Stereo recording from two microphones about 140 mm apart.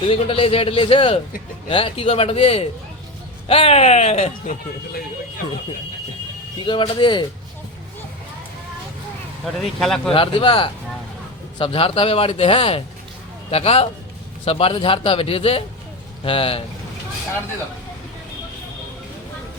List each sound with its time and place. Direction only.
0.1 s a man's voice: 40° left (ahead or behind)
6.7 s a man's voice: 35° left (ahead or behind)
9.6 s speech: 5° left (ahead or behind)
10.1 s a man's voice: 35° left (ahead or behind)